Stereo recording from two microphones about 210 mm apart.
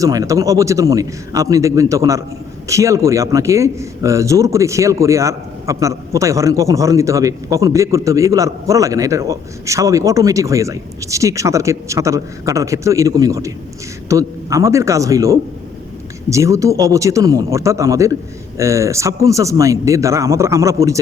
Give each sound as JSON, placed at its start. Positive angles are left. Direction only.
{"t": 0.0, "sound": "a man's voice", "side_deg": -15}